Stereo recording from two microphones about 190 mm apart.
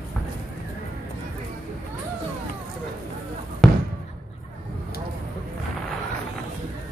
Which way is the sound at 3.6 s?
Centre (ahead or behind).